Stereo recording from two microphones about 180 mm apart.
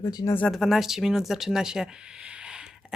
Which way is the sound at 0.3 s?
5° left (ahead or behind).